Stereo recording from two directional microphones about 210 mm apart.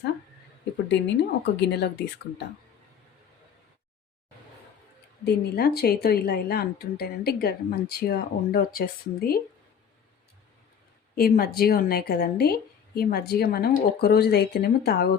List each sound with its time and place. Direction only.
0.9 s speech: 55° left (ahead or behind)
5.2 s a woman's voice: 50° left (ahead or behind)
11.1 s a woman's voice: 50° left (ahead or behind)